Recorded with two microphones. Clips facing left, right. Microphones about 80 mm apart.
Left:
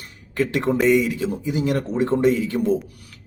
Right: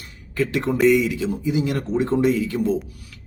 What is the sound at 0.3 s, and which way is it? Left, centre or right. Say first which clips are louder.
Speech: left 1 dB; left.